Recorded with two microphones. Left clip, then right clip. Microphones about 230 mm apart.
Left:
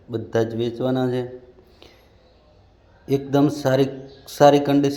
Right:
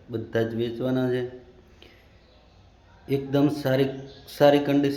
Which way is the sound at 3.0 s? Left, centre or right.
Centre.